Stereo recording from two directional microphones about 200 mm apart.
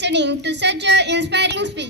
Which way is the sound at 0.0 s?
60° right (ahead or behind).